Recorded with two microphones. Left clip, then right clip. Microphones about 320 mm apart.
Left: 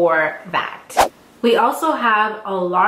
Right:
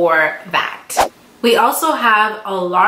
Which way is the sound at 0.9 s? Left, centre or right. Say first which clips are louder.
Left 4 dB; centre.